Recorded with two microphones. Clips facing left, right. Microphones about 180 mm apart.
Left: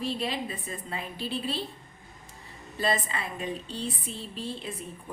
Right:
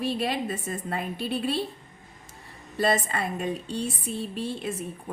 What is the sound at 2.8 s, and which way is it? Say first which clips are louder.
A woman's voice: right 4 dB; 50° right (ahead or behind).